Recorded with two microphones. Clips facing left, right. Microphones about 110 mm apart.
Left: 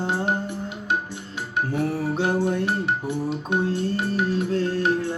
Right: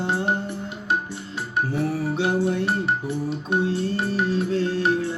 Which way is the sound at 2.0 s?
45° left (ahead or behind).